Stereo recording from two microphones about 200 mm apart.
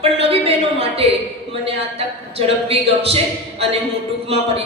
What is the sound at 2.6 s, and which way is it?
Speech, 30° right (ahead or behind).